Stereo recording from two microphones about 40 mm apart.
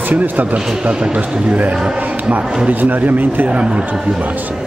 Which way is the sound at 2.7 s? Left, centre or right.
Right.